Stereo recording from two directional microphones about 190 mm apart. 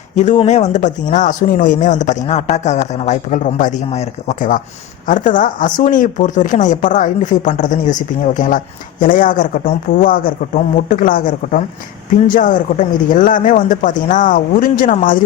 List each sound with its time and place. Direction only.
0.2 s speech: 35° left (ahead or behind)